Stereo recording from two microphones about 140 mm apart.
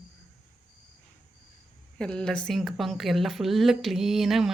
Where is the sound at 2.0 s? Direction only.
5° left (ahead or behind).